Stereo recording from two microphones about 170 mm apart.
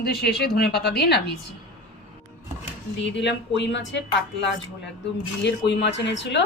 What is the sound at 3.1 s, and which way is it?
Speech, 90° left.